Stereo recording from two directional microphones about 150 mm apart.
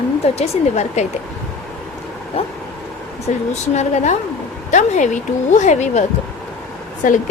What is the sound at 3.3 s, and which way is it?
Speech, 45° left (ahead or behind).